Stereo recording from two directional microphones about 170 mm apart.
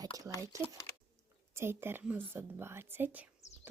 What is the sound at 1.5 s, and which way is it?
Speech, 15° right (ahead or behind).